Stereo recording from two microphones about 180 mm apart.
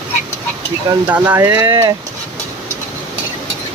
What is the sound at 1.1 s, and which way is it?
Speech, 10° right (ahead or behind).